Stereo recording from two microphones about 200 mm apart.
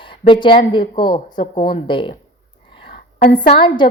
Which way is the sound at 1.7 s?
25° left (ahead or behind).